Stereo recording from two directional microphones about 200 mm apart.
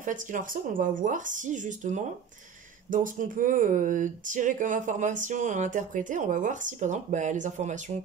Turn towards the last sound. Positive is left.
turn(degrees=-35)  # may be behind; listen again after turning